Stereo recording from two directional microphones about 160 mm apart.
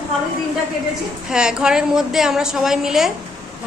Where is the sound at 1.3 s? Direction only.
5° right (ahead or behind).